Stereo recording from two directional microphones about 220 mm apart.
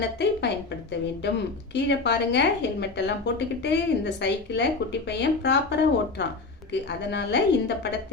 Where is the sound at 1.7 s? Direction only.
50° left (ahead or behind).